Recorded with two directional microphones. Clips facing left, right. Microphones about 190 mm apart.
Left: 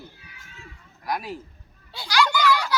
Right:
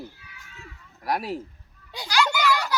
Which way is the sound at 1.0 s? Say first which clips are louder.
Right 2 dB; 30° right (ahead or behind).